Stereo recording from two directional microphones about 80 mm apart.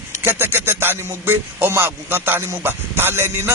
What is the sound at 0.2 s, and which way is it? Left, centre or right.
A man's voice, right.